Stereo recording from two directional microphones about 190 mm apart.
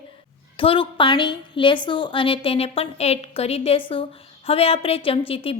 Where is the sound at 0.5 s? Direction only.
30° left (ahead or behind).